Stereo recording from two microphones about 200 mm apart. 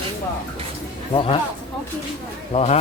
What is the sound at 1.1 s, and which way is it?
Speech, 25° left (ahead or behind).